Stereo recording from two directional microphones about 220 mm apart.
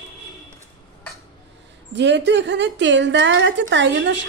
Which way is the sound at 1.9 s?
50° right (ahead or behind).